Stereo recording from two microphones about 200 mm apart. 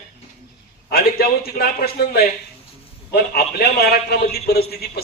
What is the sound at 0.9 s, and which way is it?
A man's voice, 50° left (ahead or behind).